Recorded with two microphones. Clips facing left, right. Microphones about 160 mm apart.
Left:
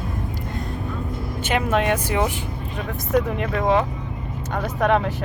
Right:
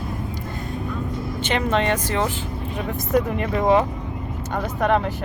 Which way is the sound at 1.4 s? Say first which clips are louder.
Even; 10° left (ahead or behind).